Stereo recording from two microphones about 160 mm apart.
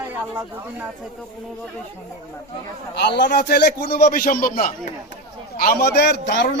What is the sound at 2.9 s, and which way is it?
A man's voice, 90° left.